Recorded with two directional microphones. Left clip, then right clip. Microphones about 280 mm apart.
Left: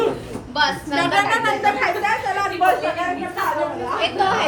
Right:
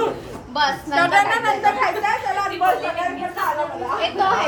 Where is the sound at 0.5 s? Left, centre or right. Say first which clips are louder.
Right 1 dB; right.